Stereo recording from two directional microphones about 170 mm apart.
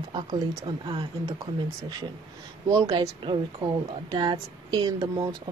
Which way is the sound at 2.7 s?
20° right (ahead or behind).